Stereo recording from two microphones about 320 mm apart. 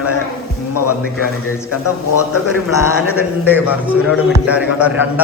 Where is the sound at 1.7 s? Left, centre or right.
Left.